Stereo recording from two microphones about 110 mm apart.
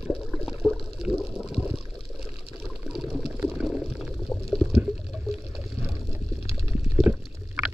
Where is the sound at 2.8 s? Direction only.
5° right (ahead or behind).